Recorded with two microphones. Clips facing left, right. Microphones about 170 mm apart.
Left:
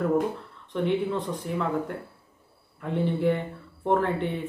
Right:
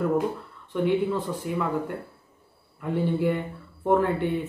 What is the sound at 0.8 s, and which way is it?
Speech, 5° right (ahead or behind).